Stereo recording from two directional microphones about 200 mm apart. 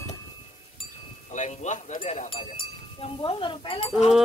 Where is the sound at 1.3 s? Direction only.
35° left (ahead or behind).